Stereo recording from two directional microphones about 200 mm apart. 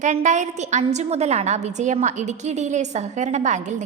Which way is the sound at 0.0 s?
35° right (ahead or behind).